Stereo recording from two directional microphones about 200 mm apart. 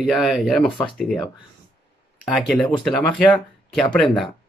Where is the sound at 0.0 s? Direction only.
Centre (ahead or behind).